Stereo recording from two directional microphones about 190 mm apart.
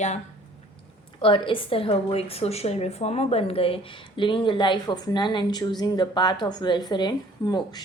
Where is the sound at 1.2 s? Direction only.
25° left (ahead or behind).